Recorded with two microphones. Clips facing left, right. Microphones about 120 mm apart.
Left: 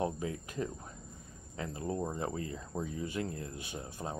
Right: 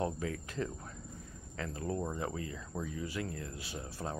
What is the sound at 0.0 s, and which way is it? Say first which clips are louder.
Speech: left 1 dB; 20° left (ahead or behind).